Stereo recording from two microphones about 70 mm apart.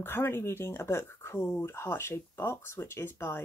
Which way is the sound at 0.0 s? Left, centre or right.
Left.